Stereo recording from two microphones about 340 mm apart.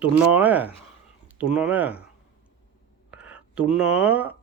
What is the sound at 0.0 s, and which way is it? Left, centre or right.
Speech, centre.